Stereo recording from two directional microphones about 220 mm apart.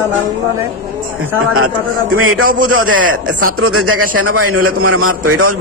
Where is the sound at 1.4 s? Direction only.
80° right.